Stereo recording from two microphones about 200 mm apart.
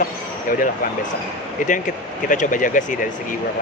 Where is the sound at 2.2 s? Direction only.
40° left (ahead or behind).